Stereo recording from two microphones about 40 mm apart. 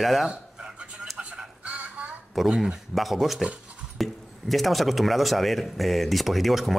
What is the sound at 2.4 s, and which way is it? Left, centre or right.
Speech, centre.